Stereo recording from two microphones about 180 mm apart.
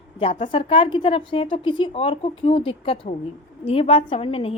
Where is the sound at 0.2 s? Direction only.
30° left (ahead or behind).